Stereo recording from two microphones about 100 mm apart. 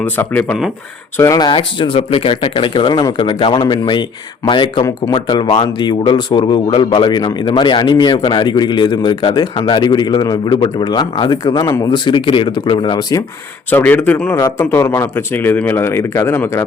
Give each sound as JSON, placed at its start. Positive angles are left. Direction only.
{"t": 0.0, "sound": "speech", "side_deg": 20}
{"t": 1.1, "sound": "speech", "side_deg": 30}
{"t": 1.4, "sound": "speech", "side_deg": 55}
{"t": 2.9, "sound": "a man's voice", "side_deg": 45}
{"t": 11.9, "sound": "a man's voice", "side_deg": 50}
{"t": 13.7, "sound": "speech", "side_deg": 20}
{"t": 14.3, "sound": "speech", "side_deg": 35}